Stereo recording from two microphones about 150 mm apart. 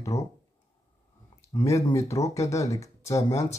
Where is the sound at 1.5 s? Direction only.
20° left (ahead or behind).